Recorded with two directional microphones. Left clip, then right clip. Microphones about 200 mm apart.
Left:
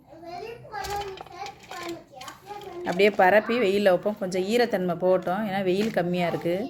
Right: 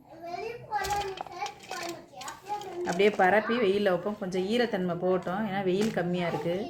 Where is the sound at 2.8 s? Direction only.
50° left (ahead or behind).